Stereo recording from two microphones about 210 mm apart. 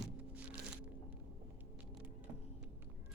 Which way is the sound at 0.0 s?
5° right (ahead or behind).